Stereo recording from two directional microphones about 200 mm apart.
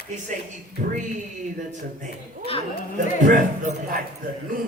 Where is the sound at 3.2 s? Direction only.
40° right (ahead or behind).